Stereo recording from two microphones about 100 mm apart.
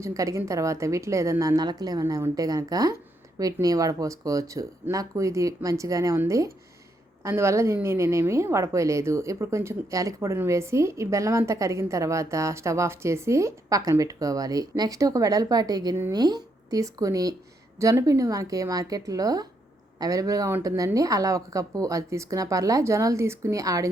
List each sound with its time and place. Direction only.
0.0 s a woman's voice: 35° right (ahead or behind)